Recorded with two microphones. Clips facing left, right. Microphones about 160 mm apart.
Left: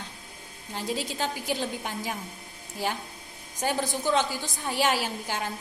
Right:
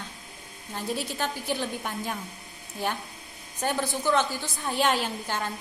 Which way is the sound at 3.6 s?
10° left (ahead or behind).